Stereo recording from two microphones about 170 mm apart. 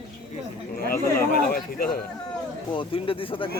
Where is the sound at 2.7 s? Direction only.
30° left (ahead or behind).